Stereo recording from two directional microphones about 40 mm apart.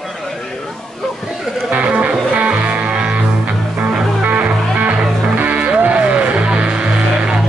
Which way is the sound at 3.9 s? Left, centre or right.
Right.